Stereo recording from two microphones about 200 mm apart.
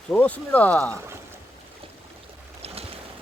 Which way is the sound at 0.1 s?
5° left (ahead or behind).